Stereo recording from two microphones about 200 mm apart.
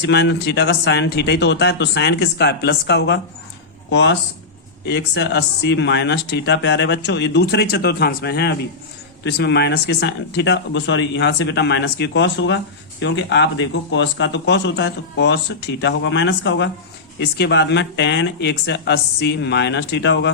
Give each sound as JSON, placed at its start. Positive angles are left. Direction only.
{"t": 0.0, "sound": "speech", "side_deg": 60}